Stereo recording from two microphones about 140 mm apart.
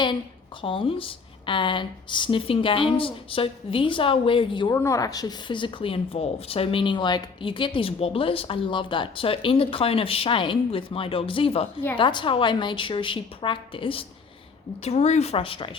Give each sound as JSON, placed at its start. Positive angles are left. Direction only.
{"t": 0.6, "sound": "speech", "side_deg": 40}
{"t": 4.7, "sound": "speech", "side_deg": 20}
{"t": 14.8, "sound": "speech", "side_deg": 50}